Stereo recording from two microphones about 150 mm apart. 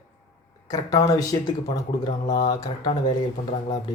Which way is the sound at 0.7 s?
25° left (ahead or behind).